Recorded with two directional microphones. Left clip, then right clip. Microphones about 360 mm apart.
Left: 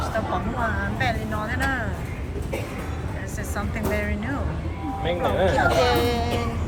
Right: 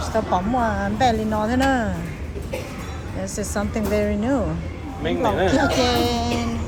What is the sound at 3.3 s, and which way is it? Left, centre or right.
Speech, centre.